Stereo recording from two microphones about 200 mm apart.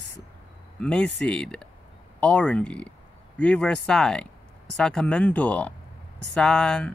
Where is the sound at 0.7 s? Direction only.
5° left (ahead or behind).